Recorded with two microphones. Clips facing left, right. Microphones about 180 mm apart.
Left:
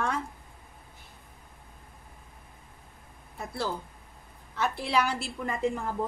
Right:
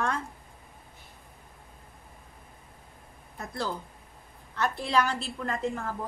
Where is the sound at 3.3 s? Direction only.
10° left (ahead or behind).